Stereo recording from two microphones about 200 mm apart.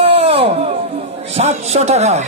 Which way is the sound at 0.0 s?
30° right (ahead or behind).